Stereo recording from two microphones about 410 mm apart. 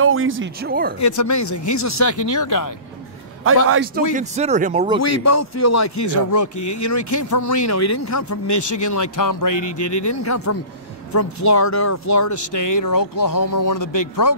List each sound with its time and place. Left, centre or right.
0.0 s speech: right
1.0 s speech: left
3.6 s speech: right
4.1 s speech: centre
5.0 s speech: left
9.6 s speech: left
10.0 s a man's voice: left